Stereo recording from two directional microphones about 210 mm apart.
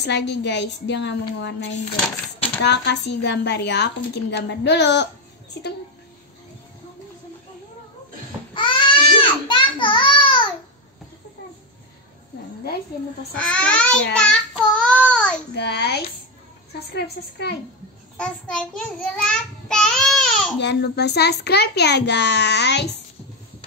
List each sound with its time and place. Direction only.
0.0 s a woman's voice: 55° left (ahead or behind)
2.6 s a woman's voice: 55° left (ahead or behind)
8.5 s baby cry: 25° left (ahead or behind)
9.5 s a sound: 25° left (ahead or behind)
13.4 s a child's voice: 5° left (ahead or behind)
14.1 s child singing: 5° left (ahead or behind)
15.5 s a woman's voice: 50° left (ahead or behind)
18.1 s a child's voice: 5° left (ahead or behind)
20.6 s a woman's voice: 50° left (ahead or behind)